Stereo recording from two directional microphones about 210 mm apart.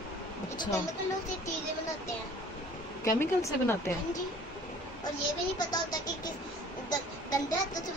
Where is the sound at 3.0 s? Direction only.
15° left (ahead or behind).